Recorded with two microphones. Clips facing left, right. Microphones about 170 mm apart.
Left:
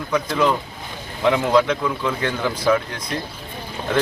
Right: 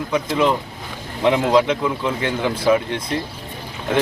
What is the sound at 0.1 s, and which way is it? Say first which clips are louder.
Speech: right 1 dB; 25° right (ahead or behind).